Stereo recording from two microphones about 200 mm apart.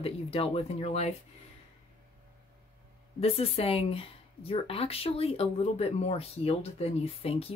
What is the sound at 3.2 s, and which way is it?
Speech, 30° left (ahead or behind).